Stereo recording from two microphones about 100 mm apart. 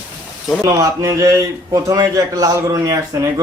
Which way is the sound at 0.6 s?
35° right (ahead or behind).